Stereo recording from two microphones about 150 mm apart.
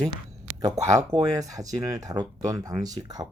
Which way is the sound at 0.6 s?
20° right (ahead or behind).